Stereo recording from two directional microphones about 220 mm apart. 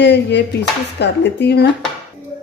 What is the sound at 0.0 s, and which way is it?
Speech, 50° left (ahead or behind).